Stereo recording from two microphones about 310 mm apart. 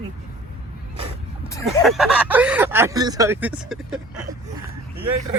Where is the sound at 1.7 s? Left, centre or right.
Centre.